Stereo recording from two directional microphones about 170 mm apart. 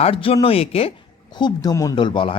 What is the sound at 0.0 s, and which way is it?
Speech, 35° left (ahead or behind).